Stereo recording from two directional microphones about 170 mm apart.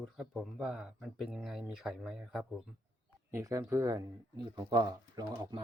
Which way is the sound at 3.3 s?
15° right (ahead or behind).